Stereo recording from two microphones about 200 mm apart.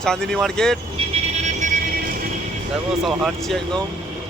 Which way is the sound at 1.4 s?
40° right (ahead or behind).